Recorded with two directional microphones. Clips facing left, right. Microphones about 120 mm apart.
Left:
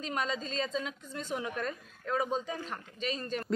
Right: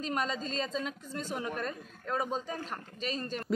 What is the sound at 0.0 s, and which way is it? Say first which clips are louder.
A woman's voice: right 1 dB; 40° right (ahead or behind).